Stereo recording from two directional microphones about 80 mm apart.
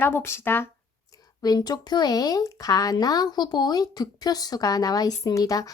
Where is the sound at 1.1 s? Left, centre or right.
Left.